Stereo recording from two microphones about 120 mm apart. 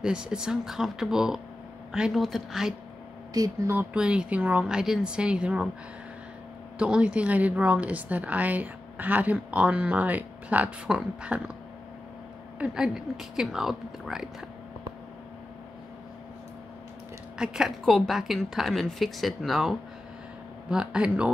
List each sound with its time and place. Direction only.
0.0 s a woman's voice: 5° right (ahead or behind)
3.3 s speech: 30° right (ahead or behind)
3.7 s a woman's voice: 10° right (ahead or behind)
6.8 s a woman's voice: 10° right (ahead or behind)
12.5 s a woman's voice: 10° right (ahead or behind)
17.4 s a woman's voice: 5° right (ahead or behind)